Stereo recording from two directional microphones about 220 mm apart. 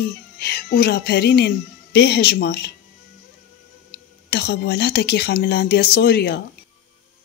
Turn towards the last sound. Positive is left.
turn(degrees=45)  # may be behind; listen again after turning